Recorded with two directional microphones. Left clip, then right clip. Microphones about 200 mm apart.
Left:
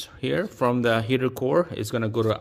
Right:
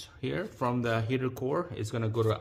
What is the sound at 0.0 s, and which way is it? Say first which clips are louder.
Speech: left 8 dB; 35° left (ahead or behind).